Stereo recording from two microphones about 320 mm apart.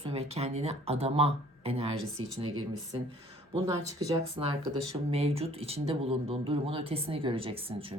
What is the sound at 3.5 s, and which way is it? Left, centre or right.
Speech, centre.